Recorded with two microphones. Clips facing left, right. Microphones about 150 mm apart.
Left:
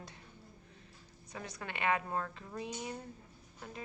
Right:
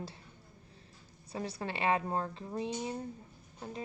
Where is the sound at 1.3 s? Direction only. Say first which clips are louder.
Right 6 dB; 30° right (ahead or behind).